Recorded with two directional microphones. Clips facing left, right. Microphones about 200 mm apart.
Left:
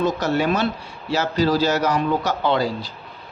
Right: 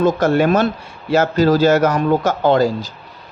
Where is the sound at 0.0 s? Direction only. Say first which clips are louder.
Right 6 dB; 50° right (ahead or behind).